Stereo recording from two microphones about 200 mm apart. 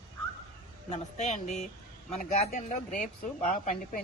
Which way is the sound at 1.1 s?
35° left (ahead or behind).